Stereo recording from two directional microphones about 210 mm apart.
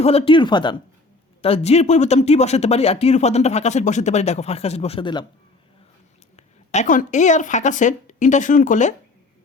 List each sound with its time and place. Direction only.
0.0 s speech: 30° left (ahead or behind)
6.3 s speech: 35° left (ahead or behind)